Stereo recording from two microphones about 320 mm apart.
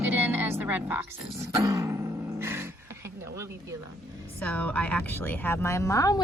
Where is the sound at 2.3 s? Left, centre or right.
Centre.